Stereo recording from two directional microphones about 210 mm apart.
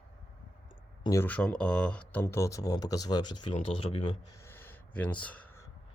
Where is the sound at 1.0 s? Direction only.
10° left (ahead or behind); by 4.1 s 25° left (ahead or behind).